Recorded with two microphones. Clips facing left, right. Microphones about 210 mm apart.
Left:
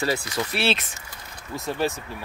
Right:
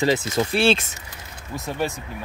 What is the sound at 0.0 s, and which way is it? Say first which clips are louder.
Speech: right 5 dB; 20° right (ahead or behind).